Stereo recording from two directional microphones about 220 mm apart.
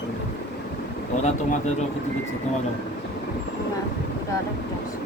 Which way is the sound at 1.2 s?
30° left (ahead or behind).